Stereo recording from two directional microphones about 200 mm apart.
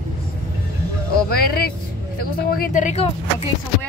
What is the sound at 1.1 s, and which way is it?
Speech, 50° left (ahead or behind).